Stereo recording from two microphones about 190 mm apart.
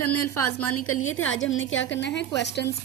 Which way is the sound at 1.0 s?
90° left.